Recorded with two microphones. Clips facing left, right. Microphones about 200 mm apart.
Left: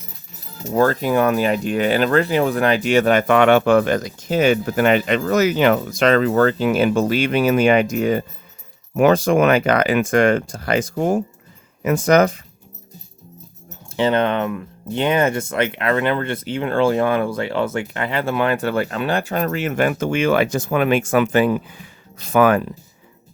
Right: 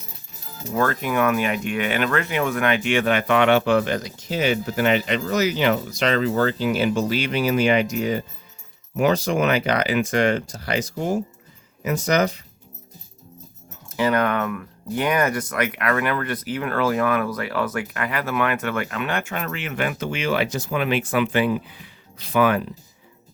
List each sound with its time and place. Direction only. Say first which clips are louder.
0.7 s speech: left 6 dB; 35° left (ahead or behind); by 12.4 s 50° left (ahead or behind)
13.9 s speech: left 3 dB; 25° left (ahead or behind); by 22.6 s 45° left (ahead or behind)